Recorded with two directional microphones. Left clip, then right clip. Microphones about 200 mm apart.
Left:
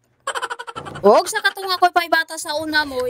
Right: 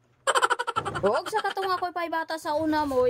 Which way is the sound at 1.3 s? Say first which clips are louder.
Left 8 dB; 45° left (ahead or behind).